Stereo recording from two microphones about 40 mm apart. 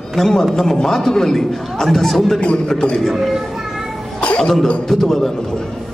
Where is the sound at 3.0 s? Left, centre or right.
Centre.